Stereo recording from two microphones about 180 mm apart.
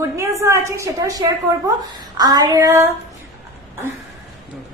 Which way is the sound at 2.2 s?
20° right (ahead or behind).